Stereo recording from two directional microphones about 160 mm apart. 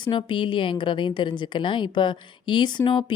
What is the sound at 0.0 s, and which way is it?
Speech, 30° left (ahead or behind).